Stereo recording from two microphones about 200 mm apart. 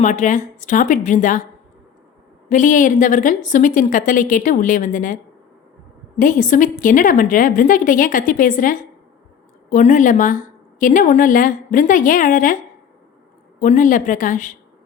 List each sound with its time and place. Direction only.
0.0 s speech: 40° left (ahead or behind)
2.5 s a woman's voice: 40° left (ahead or behind)
13.6 s speech: 40° left (ahead or behind)